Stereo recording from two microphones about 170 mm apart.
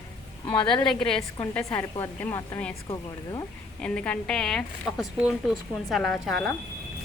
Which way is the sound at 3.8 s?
5° left (ahead or behind).